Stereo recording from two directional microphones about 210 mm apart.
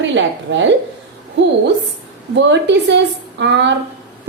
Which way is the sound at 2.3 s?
55° right (ahead or behind).